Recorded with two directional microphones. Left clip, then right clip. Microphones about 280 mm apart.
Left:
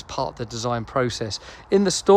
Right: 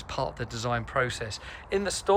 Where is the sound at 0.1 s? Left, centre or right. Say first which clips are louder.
Left 4 dB; centre.